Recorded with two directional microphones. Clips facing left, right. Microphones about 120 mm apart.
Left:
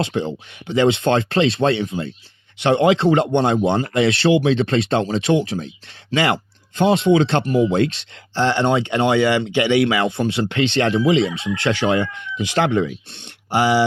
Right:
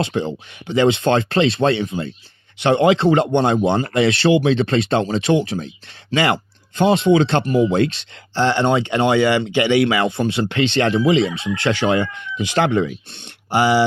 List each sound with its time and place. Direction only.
0.0 s speech: 45° right (ahead or behind)
1.1 s speech: 45° right (ahead or behind)
10.6 s speech: 50° right (ahead or behind)